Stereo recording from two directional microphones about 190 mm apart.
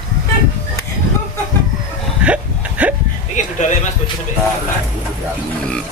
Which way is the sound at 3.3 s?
40° left (ahead or behind).